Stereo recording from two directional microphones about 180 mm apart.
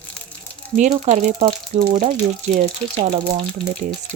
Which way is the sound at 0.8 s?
40° right (ahead or behind).